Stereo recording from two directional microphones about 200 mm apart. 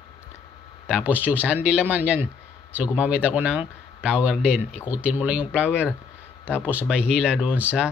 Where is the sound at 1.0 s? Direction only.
10° right (ahead or behind).